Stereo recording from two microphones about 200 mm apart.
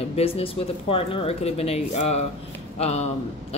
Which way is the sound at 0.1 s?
30° left (ahead or behind).